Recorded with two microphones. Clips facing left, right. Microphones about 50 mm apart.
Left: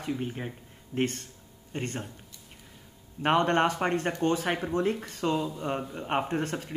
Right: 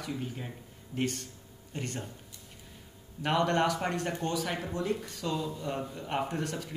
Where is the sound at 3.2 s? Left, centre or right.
Left.